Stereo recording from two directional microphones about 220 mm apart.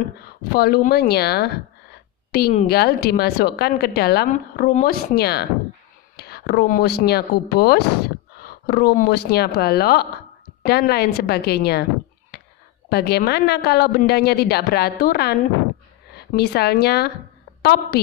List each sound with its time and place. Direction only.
0.5 s a woman's voice: 45° left (ahead or behind)
12.3 s a sound: 45° left (ahead or behind)
12.9 s a woman's voice: 45° left (ahead or behind)